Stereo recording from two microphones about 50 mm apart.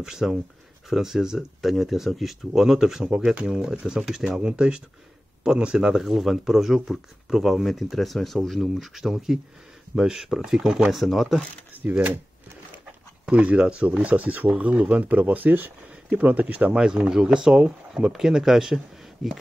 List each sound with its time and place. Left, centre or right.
0.0 s speech: centre
4.4 s speech: centre
6.0 s speech: centre
11.9 s speech: right
13.3 s speech: right
16.7 s speech: centre